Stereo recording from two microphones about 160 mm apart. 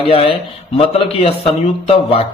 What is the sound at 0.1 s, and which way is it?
A man's voice, 35° left (ahead or behind).